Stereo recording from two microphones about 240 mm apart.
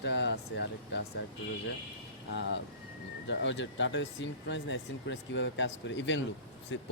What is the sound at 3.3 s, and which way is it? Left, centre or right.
Speech, left.